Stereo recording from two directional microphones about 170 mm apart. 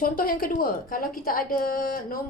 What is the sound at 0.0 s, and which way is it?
A woman's voice, 55° left (ahead or behind).